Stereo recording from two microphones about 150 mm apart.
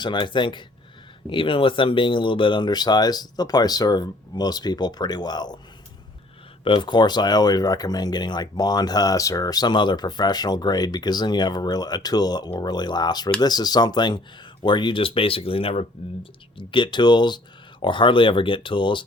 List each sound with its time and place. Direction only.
0.0 s speech: 30° left (ahead or behind)
6.7 s speech: 30° left (ahead or behind)